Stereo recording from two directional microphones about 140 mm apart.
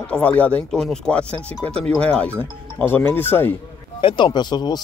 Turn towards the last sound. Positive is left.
turn(degrees=30)  # may be behind; listen again after turning